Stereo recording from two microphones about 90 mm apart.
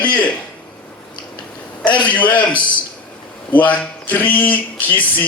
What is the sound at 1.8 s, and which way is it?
Speech, 15° left (ahead or behind).